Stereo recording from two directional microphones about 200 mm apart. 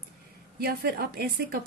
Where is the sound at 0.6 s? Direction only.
50° right (ahead or behind).